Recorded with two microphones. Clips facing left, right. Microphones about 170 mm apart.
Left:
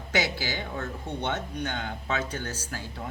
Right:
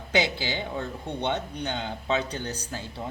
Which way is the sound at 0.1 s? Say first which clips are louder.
Right 2 dB; 20° right (ahead or behind).